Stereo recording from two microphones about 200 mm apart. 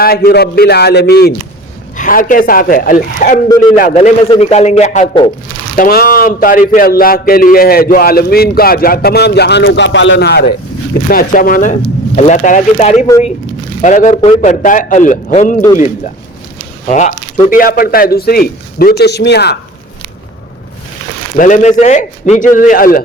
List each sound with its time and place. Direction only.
0.0 s a man's voice: 50° left (ahead or behind); by 5.0 s 35° left (ahead or behind)
5.7 s a man's voice: 45° left (ahead or behind)
16.9 s a man's voice: 35° left (ahead or behind); by 19.5 s 55° left (ahead or behind)
21.3 s speech: 40° left (ahead or behind)